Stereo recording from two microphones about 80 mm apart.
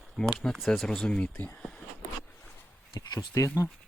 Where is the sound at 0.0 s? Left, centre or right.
Centre.